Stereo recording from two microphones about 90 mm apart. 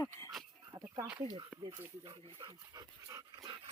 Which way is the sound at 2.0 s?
80° right.